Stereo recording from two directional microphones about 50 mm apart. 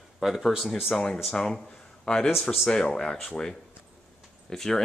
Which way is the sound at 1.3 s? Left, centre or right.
Centre.